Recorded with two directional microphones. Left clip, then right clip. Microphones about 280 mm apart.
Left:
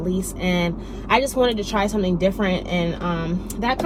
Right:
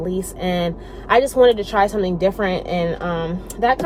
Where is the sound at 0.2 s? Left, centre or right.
Right.